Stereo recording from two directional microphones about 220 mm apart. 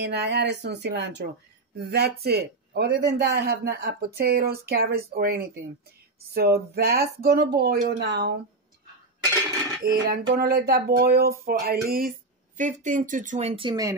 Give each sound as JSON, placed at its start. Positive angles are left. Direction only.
{"t": 0.0, "sound": "a man's voice", "side_deg": -50}
{"t": 10.0, "sound": "a man's voice", "side_deg": -45}